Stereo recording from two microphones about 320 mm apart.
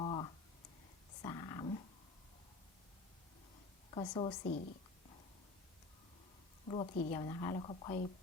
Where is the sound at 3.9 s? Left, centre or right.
Centre.